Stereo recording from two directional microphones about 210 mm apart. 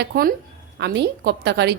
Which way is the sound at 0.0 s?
45° right (ahead or behind).